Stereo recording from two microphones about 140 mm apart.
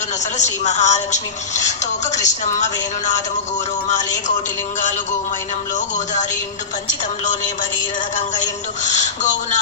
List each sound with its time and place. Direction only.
0.4 s a woman's voice: 55° left (ahead or behind)
5.8 s a woman's voice: 60° left (ahead or behind)
8.2 s a woman's voice: 60° left (ahead or behind)